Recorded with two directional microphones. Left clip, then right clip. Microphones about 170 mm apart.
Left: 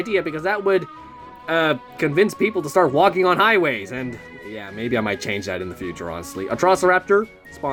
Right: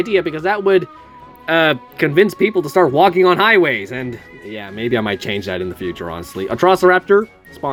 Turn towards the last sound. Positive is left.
turn(degrees=-35)  # may be behind; listen again after turning